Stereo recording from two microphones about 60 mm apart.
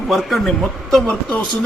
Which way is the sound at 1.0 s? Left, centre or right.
Centre.